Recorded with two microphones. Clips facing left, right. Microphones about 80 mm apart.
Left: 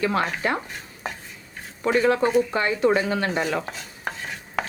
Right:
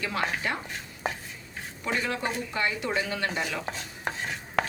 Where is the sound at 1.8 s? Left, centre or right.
Left.